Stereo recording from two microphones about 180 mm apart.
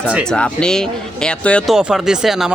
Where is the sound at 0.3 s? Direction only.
5° left (ahead or behind).